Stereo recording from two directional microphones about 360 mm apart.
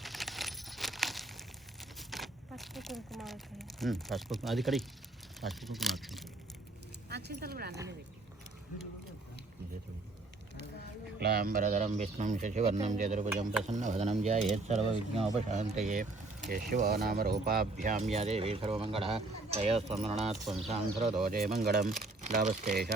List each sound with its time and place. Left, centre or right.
0.0 s a sound: centre
5.4 s speech: centre
7.1 s speech: right
11.2 s speech: right